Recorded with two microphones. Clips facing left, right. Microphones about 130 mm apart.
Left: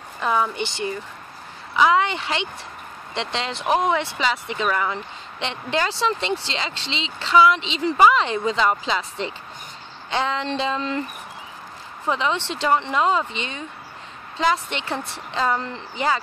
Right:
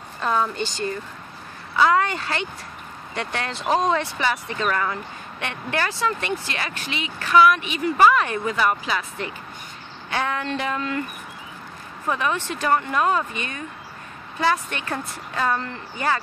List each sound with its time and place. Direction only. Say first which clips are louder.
0.2 s speech: left 1 dB; 10° left (ahead or behind)
1.8 s speech: left 1 dB; 20° left (ahead or behind)
12.1 s speech: left 1 dB; 20° left (ahead or behind)